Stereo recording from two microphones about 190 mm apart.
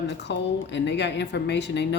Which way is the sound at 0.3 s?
65° left (ahead or behind).